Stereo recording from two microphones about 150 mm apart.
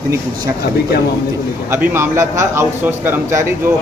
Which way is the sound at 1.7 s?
15° right (ahead or behind).